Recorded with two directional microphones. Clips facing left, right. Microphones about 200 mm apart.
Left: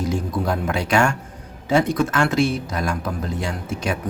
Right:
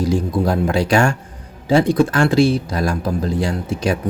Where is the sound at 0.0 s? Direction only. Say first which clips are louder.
Right 5 dB; 35° right (ahead or behind).